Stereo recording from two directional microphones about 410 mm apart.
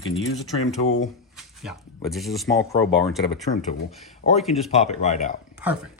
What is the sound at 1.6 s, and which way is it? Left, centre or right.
Speech, centre.